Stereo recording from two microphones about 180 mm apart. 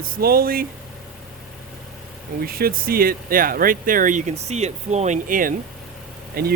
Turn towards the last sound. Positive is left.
turn(degrees=-55)  # may be behind; listen again after turning